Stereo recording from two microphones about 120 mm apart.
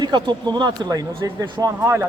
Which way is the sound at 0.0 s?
40° right (ahead or behind).